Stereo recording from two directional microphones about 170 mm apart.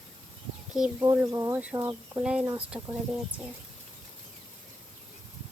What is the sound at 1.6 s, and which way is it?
Speech, 5° right (ahead or behind).